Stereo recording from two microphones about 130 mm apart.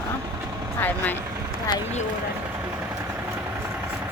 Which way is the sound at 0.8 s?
15° left (ahead or behind).